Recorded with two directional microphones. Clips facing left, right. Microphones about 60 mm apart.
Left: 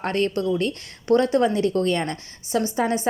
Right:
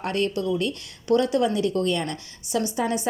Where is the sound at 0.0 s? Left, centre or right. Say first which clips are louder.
Left 2 dB; left.